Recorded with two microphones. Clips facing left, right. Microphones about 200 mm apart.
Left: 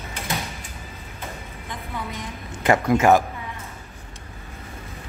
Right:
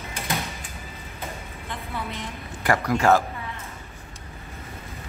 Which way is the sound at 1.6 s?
20° left (ahead or behind).